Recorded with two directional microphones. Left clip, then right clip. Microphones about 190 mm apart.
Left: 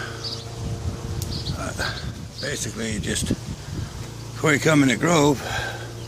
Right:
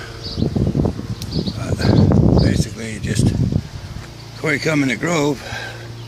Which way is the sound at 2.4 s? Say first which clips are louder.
Right 6 dB; centre (ahead or behind).